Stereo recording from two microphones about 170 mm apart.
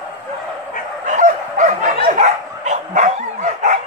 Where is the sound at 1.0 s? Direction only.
45° right (ahead or behind).